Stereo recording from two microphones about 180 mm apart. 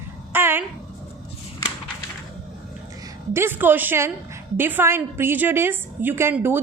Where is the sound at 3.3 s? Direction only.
10° right (ahead or behind).